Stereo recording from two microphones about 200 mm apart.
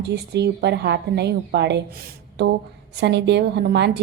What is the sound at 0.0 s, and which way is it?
A woman's voice, 55° right (ahead or behind).